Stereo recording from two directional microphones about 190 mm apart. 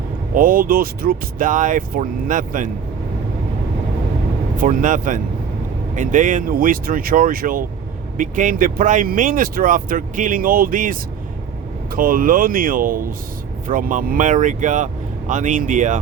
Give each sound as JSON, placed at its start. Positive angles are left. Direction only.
{"t": 0.3, "sound": "speech", "side_deg": -45}
{"t": 4.5, "sound": "speech", "side_deg": -45}
{"t": 11.9, "sound": "speech", "side_deg": -45}